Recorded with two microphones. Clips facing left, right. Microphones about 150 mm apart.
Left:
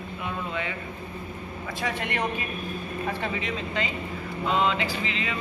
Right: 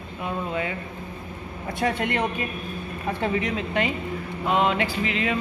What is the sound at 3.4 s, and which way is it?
Speech, 60° right (ahead or behind).